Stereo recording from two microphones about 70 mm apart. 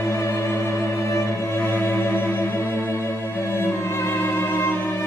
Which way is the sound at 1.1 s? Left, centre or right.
Left.